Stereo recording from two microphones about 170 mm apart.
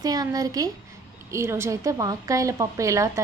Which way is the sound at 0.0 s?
20° right (ahead or behind).